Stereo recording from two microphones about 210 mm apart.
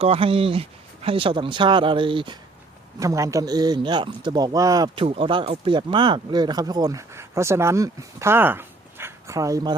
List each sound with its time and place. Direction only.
0.0 s speech: 25° right (ahead or behind)